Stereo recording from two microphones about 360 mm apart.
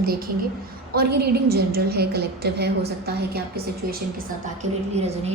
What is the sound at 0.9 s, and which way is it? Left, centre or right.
A woman's voice, right.